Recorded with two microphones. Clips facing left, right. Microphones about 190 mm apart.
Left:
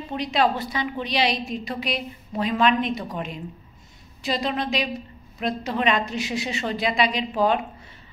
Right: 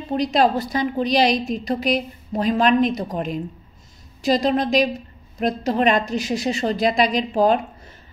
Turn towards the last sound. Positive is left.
turn(degrees=-40)  # may be behind; listen again after turning